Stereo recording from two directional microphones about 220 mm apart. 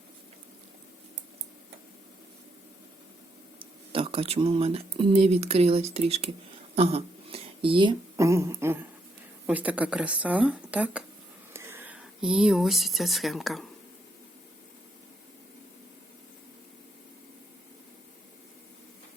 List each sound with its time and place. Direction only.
3.6 s speech: 25° right (ahead or behind); by 13.7 s centre (ahead or behind)